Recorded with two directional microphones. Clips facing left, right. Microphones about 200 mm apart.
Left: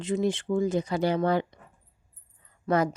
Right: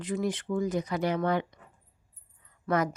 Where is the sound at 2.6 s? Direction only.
30° left (ahead or behind).